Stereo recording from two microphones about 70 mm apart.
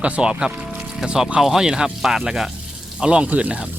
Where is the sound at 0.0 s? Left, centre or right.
Centre.